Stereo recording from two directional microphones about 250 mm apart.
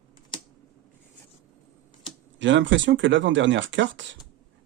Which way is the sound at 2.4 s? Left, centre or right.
Right.